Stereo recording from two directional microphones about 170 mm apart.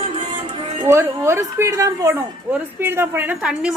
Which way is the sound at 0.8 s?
15° right (ahead or behind).